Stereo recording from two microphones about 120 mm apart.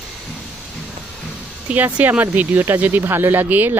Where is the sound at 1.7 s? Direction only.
15° right (ahead or behind).